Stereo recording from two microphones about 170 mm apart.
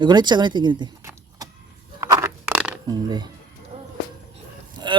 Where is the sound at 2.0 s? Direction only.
15° right (ahead or behind).